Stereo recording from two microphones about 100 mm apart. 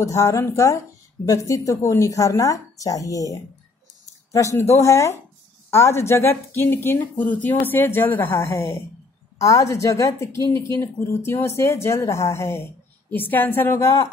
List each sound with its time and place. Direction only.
0.0 s a woman's voice: 35° left (ahead or behind)
4.6 s a woman's voice: 25° left (ahead or behind)